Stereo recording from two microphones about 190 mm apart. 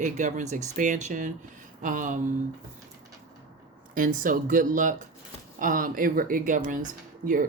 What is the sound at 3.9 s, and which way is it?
Speech, 45° right (ahead or behind).